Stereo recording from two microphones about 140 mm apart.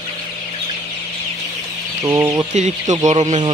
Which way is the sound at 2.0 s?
20° right (ahead or behind).